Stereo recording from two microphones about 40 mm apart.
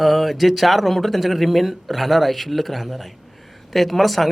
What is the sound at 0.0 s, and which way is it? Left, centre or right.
Speech, centre.